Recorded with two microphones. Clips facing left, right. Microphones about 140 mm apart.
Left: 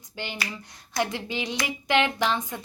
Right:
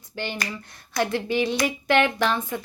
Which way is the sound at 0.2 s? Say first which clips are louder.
Right 4 dB; 15° left (ahead or behind).